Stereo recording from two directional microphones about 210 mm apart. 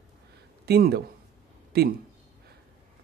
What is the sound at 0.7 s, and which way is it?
Speech, 50° right (ahead or behind).